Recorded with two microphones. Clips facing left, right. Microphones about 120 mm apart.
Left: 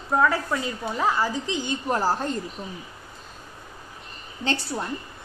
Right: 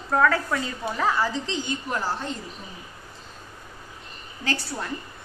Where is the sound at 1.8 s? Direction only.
35° left (ahead or behind).